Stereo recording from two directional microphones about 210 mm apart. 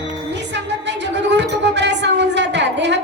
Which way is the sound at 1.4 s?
55° right (ahead or behind).